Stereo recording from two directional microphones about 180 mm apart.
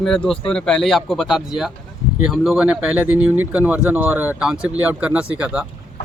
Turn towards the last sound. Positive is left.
turn(degrees=-5)  # may be behind; listen again after turning